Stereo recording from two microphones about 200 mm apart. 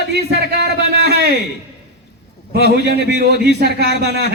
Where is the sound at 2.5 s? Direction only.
55° right (ahead or behind).